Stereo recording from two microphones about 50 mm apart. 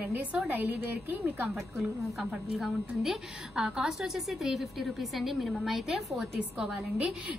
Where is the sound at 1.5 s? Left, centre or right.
Centre.